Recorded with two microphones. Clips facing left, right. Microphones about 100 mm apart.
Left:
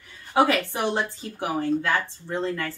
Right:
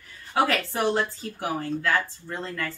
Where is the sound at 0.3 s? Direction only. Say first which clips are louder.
Left 3 dB; 20° left (ahead or behind).